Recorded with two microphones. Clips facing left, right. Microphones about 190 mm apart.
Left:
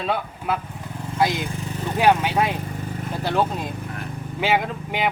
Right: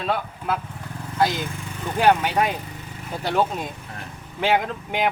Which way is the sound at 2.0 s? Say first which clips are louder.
Even; 5° left (ahead or behind).